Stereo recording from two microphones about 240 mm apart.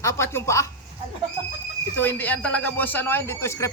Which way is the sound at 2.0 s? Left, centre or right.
Centre.